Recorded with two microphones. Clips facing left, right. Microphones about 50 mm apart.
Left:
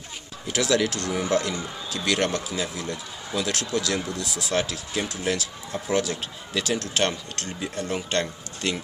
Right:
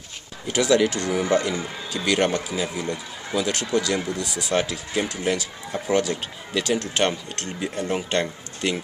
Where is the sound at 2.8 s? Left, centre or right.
Right.